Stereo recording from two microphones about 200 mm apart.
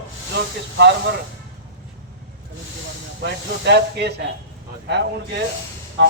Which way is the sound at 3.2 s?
55° right (ahead or behind).